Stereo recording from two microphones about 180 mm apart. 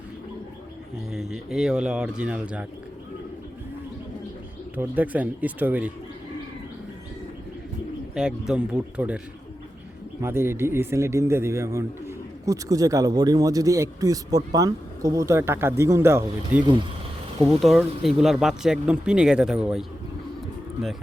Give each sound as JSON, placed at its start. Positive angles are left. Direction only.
{"t": 1.1, "sound": "speech", "side_deg": -5}
{"t": 4.8, "sound": "speech", "side_deg": -10}
{"t": 8.1, "sound": "speech", "side_deg": -5}
{"t": 17.4, "sound": "speech", "side_deg": 0}